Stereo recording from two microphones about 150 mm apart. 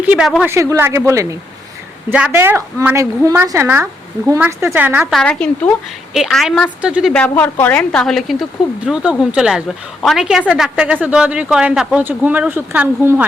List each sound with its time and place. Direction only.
0.0 s a sound: 10° right (ahead or behind)
0.4 s a woman's voice: 20° right (ahead or behind)
5.1 s a woman's voice: 5° left (ahead or behind)
7.1 s a woman's voice: 10° left (ahead or behind); by 13.2 s 10° right (ahead or behind)